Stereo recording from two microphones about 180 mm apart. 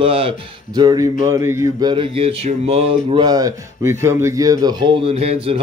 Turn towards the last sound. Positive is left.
turn(degrees=-35)  # may be behind; listen again after turning